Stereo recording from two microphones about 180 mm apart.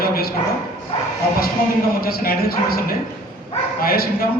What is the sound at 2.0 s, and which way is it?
A man's voice, 55° left (ahead or behind).